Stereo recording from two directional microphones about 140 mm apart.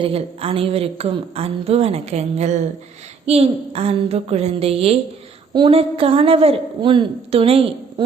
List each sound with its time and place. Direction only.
0.0 s a woman's voice: 45° right (ahead or behind)